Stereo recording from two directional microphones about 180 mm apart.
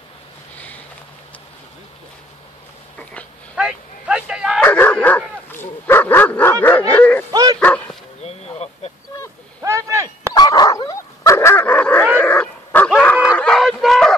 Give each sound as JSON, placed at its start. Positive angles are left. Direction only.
{"t": 3.0, "sound": "a sound", "side_deg": 10}
{"t": 3.5, "sound": "vehicle", "side_deg": -5}
{"t": 4.6, "sound": "dog", "side_deg": 10}
{"t": 6.9, "sound": "bow-wow", "side_deg": 10}
{"t": 7.2, "sound": "bow-wow", "side_deg": -20}
{"t": 7.6, "sound": "bow-wow", "side_deg": 10}
{"t": 8.2, "sound": "a sound", "side_deg": 35}
{"t": 9.6, "sound": "a sound", "side_deg": -15}
{"t": 10.3, "sound": "dog", "side_deg": 20}